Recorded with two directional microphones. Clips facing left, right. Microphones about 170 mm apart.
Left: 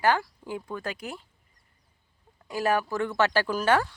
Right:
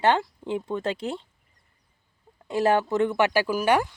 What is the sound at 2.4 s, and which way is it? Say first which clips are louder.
Speech: right 4 dB; 25° right (ahead or behind).